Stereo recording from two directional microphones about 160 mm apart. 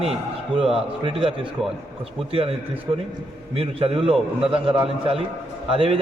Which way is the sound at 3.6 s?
35° right (ahead or behind).